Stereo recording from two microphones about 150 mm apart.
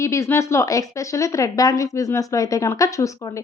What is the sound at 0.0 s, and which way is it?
Speech, 20° left (ahead or behind).